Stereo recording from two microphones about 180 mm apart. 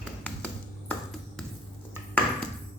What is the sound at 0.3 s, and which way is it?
Ping, 5° left (ahead or behind).